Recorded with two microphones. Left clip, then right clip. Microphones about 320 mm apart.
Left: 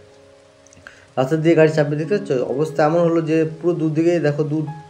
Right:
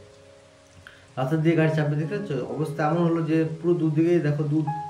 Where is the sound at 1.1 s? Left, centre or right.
Centre.